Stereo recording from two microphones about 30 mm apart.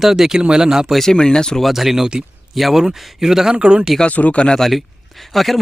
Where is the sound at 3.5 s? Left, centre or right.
Right.